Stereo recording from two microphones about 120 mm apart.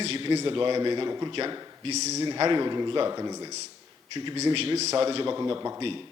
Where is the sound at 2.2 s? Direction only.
40° right (ahead or behind).